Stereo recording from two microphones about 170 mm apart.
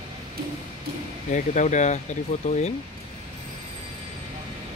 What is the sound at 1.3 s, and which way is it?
Speech, 45° left (ahead or behind).